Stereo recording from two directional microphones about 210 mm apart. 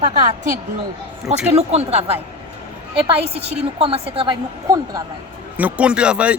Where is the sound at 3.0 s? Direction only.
30° right (ahead or behind).